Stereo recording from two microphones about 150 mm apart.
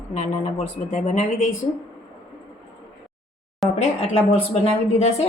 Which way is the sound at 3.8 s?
45° left (ahead or behind).